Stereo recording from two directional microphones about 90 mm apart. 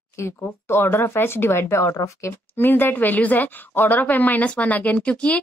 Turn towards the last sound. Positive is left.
turn(degrees=10)  # may be behind; listen again after turning